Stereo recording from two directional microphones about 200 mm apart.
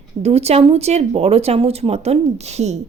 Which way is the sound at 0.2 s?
30° right (ahead or behind).